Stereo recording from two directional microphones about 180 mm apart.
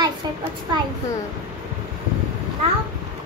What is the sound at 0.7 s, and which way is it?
Speech, 25° right (ahead or behind).